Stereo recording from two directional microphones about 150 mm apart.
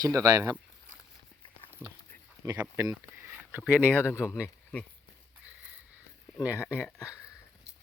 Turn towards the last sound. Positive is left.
turn(degrees=20)  # may be behind; listen again after turning